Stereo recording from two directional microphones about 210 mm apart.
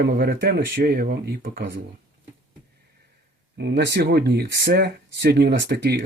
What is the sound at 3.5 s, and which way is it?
Speech, 55° right (ahead or behind).